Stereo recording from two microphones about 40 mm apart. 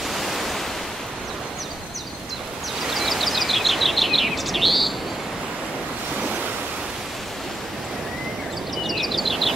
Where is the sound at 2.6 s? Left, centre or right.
Centre.